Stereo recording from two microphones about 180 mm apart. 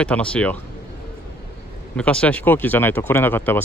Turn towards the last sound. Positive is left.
turn(degrees=10)  # may be behind; listen again after turning